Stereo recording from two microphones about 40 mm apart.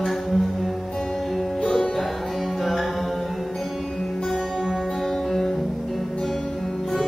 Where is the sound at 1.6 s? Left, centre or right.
Centre.